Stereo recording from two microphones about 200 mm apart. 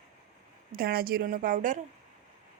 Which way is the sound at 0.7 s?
50° right (ahead or behind).